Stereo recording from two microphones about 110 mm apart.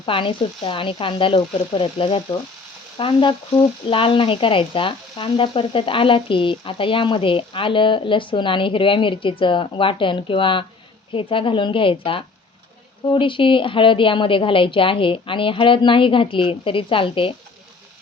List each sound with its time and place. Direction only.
0.0 s speech: 50° left (ahead or behind)